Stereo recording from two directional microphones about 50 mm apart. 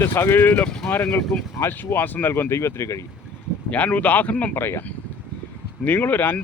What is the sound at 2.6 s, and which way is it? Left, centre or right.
Speech, left.